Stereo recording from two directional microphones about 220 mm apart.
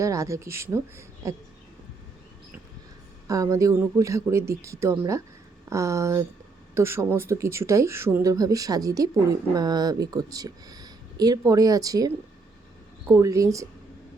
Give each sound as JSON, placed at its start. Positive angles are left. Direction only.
{"t": 0.0, "sound": "speech", "side_deg": -15}
{"t": 3.2, "sound": "speech", "side_deg": -15}